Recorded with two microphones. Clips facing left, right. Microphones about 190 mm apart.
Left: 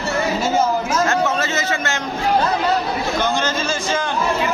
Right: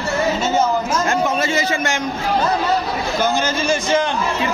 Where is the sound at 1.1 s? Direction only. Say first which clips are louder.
Right 1 dB; 15° right (ahead or behind).